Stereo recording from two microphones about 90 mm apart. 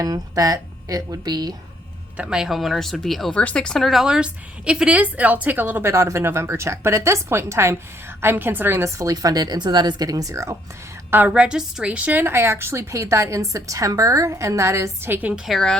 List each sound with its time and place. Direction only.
0.0 s speech: 40° right (ahead or behind)
2.1 s speech: 10° right (ahead or behind)
3.3 s a woman's voice: 15° left (ahead or behind); by 5.9 s 20° right (ahead or behind)
5.9 s a woman's voice: 35° right (ahead or behind)
9.0 s speech: 40° right (ahead or behind)
11.1 s a woman's voice: 20° right (ahead or behind)
15.4 s speech: 5° left (ahead or behind)